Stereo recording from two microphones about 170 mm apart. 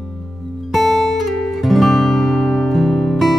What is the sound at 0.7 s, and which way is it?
Music, centre (ahead or behind).